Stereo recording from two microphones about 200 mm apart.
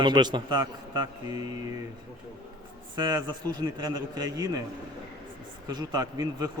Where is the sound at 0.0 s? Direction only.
20° right (ahead or behind).